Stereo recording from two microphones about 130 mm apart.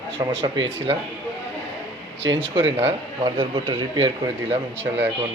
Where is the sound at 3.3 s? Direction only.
35° right (ahead or behind).